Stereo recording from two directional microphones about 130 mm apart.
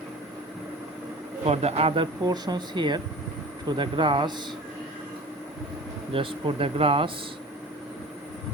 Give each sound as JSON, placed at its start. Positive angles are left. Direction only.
{"t": 1.5, "sound": "speech", "side_deg": -50}
{"t": 2.2, "sound": "speech", "side_deg": -30}
{"t": 6.1, "sound": "speech", "side_deg": -40}